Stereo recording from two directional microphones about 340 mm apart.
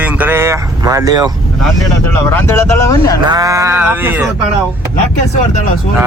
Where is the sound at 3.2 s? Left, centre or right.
Centre.